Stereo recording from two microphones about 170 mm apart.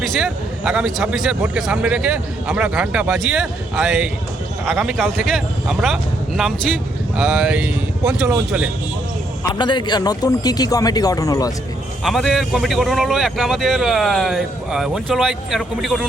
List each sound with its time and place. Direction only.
0.0 s a man's voice: centre (ahead or behind)
9.4 s speech: 25° left (ahead or behind)
12.0 s a man's voice: centre (ahead or behind)